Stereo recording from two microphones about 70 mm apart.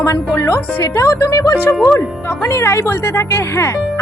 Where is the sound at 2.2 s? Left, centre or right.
Left.